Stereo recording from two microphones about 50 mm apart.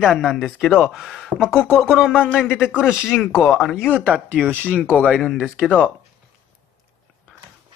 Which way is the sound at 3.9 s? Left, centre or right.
Right.